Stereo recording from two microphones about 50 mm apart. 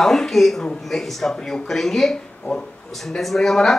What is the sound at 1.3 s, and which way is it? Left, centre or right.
Speech, centre.